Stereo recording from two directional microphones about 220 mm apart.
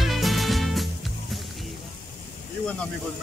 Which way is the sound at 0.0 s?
Centre (ahead or behind).